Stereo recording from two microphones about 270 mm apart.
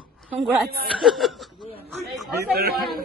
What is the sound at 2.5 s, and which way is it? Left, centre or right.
Speech, right.